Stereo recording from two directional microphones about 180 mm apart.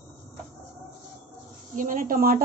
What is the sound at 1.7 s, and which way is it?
Speech, 45° right (ahead or behind).